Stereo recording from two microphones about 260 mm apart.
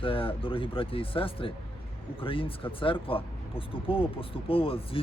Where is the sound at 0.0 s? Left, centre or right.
Left.